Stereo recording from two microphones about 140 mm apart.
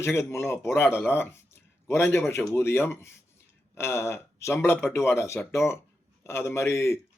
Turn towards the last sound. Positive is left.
turn(degrees=20)  # may be behind; listen again after turning